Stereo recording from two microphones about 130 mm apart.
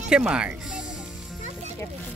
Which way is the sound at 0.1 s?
5° right (ahead or behind).